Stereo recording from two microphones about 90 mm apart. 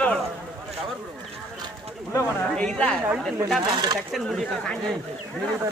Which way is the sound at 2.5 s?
10° left (ahead or behind).